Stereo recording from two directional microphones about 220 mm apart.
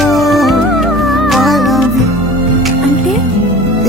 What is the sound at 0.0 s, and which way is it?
Music, centre (ahead or behind).